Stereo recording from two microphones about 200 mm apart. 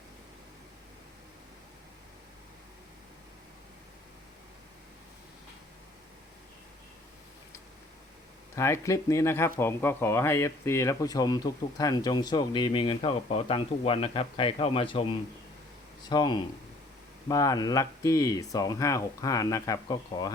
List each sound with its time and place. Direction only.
8.5 s speech: 15° left (ahead or behind)
16.0 s speech: 20° left (ahead or behind)